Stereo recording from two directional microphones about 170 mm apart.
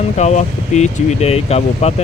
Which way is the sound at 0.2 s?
40° left (ahead or behind).